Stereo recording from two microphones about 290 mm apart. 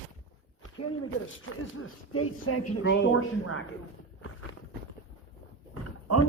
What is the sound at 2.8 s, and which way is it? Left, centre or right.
Speech, left.